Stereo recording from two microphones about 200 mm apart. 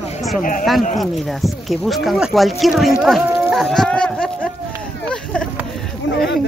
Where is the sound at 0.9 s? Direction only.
Centre (ahead or behind).